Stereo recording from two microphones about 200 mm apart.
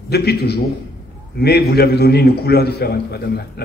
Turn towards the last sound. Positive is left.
turn(degrees=50)  # may be behind; listen again after turning